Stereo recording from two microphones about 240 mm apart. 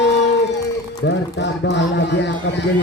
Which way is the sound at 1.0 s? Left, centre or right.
Left.